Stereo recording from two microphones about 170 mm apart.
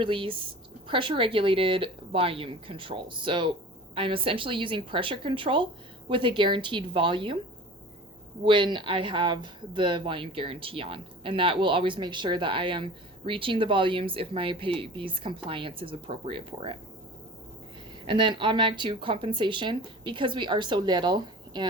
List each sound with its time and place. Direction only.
0.0 s speech: 30° right (ahead or behind)
8.4 s speech: 30° right (ahead or behind)
18.0 s speech: 30° right (ahead or behind)